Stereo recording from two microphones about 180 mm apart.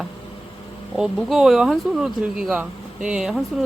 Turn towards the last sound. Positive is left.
turn(degrees=0)  # may be behind; listen again after turning